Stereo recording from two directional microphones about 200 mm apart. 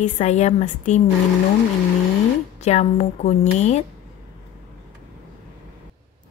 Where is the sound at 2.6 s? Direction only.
35° left (ahead or behind).